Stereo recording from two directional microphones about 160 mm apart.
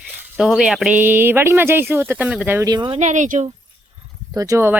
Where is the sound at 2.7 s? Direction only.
30° right (ahead or behind).